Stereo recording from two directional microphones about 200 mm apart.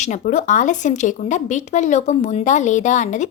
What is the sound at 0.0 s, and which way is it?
A woman's voice, 35° left (ahead or behind).